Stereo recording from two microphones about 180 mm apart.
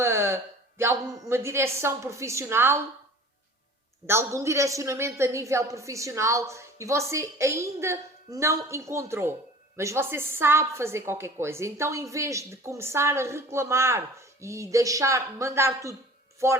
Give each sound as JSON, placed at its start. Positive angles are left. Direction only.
{"t": 0.0, "sound": "a sound", "side_deg": -15}
{"t": 0.8, "sound": "a woman's voice", "side_deg": -15}
{"t": 4.0, "sound": "a woman's voice", "side_deg": -15}